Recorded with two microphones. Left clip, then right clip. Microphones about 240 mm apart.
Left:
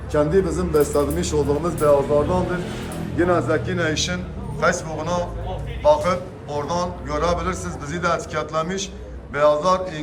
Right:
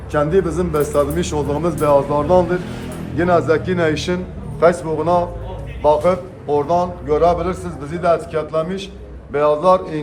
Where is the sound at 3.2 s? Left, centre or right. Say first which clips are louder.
Right 4 dB; right.